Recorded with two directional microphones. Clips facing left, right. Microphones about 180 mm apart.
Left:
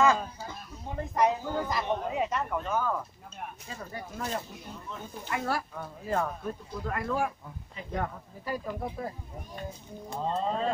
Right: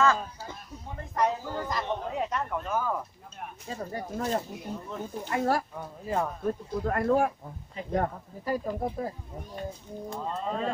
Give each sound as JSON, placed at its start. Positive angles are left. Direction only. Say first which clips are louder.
{"t": 1.1, "sound": "speech", "louder": "left 1 dB", "side_deg": 15}
{"t": 3.6, "sound": "speech", "louder": "right 10 dB", "side_deg": -40}
{"t": 5.8, "sound": "speech", "louder": "even", "side_deg": -15}
{"t": 6.4, "sound": "speech", "louder": "right 6 dB", "side_deg": -45}
{"t": 10.2, "sound": "speech", "louder": "left 4 dB", "side_deg": 30}